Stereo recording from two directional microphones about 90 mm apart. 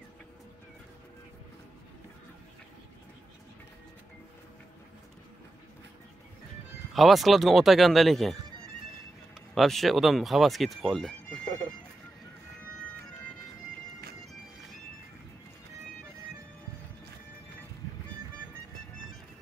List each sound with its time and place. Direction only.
6.9 s speech: centre (ahead or behind)
9.6 s speech: centre (ahead or behind)